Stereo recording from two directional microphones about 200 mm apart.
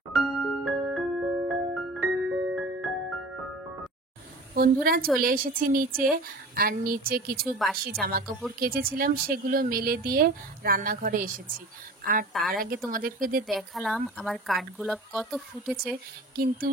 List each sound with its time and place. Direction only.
0.1 s music: centre (ahead or behind)
4.6 s speech: 50° right (ahead or behind)
12.3 s speech: centre (ahead or behind)
12.5 s speech: 45° right (ahead or behind)
13.5 s speech: centre (ahead or behind)
16.3 s speech: 45° right (ahead or behind)